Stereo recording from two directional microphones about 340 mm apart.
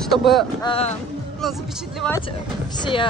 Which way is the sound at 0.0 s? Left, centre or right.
Centre.